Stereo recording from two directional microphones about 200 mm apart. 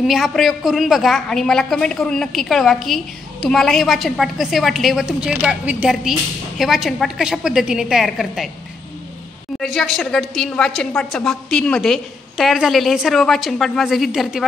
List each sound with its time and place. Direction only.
0.0 s a woman's voice: centre (ahead or behind)
9.6 s a woman's voice: centre (ahead or behind)